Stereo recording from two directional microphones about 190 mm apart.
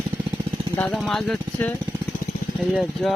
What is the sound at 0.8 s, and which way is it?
Speech, 5° left (ahead or behind).